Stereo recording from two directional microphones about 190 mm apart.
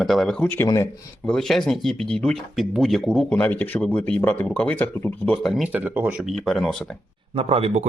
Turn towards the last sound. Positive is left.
turn(degrees=-30)  # may be behind; listen again after turning